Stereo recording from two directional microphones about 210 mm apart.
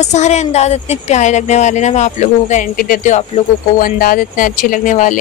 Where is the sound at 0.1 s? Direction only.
35° left (ahead or behind).